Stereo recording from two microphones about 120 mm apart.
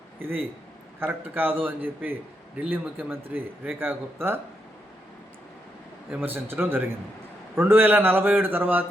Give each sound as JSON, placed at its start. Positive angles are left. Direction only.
{"t": 0.2, "sound": "speech", "side_deg": -15}
{"t": 6.1, "sound": "speech", "side_deg": -15}